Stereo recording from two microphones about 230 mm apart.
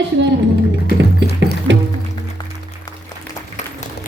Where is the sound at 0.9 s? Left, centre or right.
Right.